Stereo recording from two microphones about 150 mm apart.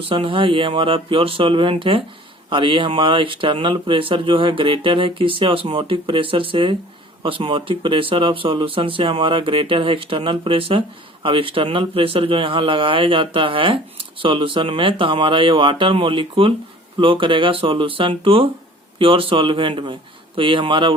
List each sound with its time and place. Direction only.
0.1 s speech: 35° right (ahead or behind)